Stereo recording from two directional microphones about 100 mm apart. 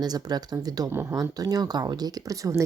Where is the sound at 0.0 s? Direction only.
40° right (ahead or behind).